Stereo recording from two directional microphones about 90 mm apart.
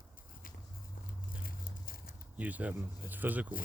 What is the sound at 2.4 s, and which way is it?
Speech, 15° right (ahead or behind).